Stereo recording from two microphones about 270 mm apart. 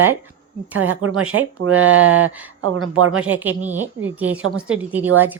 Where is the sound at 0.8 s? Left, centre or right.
Right.